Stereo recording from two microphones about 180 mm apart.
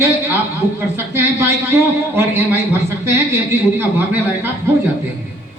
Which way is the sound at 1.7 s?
15° right (ahead or behind).